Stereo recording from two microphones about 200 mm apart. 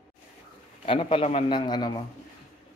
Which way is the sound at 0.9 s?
25° left (ahead or behind).